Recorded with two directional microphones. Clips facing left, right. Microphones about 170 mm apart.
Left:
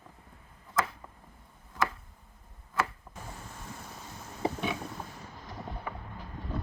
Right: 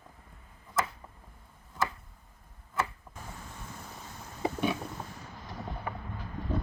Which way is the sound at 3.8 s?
Centre (ahead or behind).